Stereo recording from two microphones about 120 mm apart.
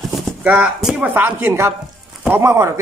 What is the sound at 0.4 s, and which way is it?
Speech, 10° right (ahead or behind).